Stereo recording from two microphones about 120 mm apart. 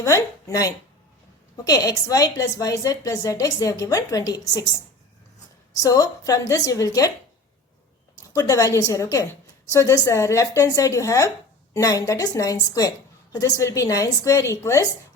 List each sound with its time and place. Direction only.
0.0 s a woman's voice: 25° left (ahead or behind)
5.7 s a woman's voice: 30° left (ahead or behind)
8.3 s a woman's voice: 30° left (ahead or behind)